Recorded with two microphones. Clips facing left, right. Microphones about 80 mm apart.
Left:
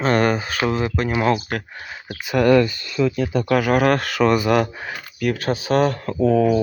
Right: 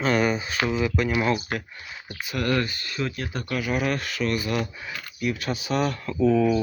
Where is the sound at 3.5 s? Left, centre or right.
Left.